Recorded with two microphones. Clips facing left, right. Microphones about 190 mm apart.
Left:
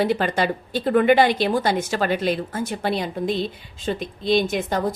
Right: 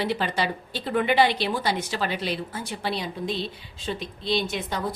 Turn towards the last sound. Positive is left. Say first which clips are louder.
# left 6 dB
turn(degrees=50)  # may be behind; listen again after turning